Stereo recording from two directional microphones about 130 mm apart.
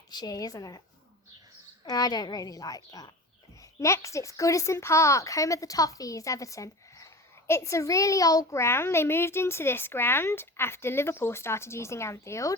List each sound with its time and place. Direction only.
0.1 s a woman's voice: 30° left (ahead or behind)
1.8 s a woman's voice: 30° left (ahead or behind)